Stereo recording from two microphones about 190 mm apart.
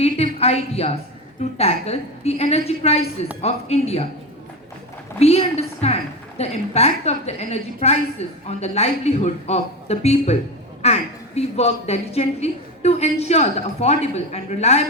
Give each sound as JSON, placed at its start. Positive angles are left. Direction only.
{"t": 0.0, "sound": "a woman's voice", "side_deg": 30}
{"t": 5.2, "sound": "a woman's voice", "side_deg": 35}